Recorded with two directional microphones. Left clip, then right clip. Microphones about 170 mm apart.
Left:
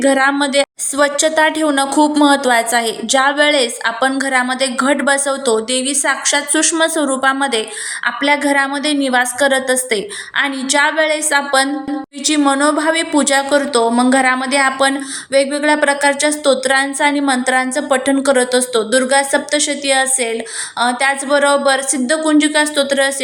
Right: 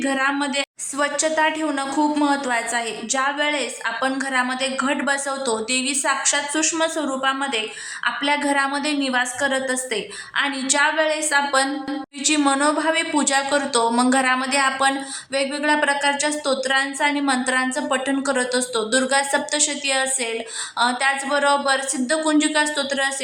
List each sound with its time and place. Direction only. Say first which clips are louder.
0.0 s a woman's voice: left 8 dB; 30° left (ahead or behind)